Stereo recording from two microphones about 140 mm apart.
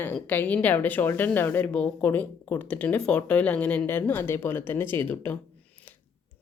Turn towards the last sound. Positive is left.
turn(degrees=15)  # may be behind; listen again after turning